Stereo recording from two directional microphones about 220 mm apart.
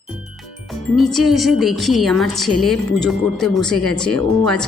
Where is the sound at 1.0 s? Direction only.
Centre (ahead or behind).